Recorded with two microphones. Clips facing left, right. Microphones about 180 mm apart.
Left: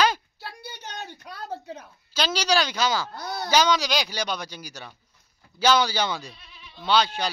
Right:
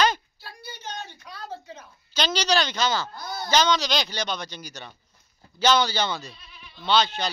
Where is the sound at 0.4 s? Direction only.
70° left (ahead or behind).